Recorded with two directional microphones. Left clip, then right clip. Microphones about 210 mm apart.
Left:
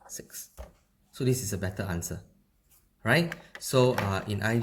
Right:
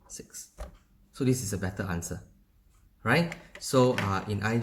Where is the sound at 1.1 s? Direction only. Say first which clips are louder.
Even; 45° left (ahead or behind).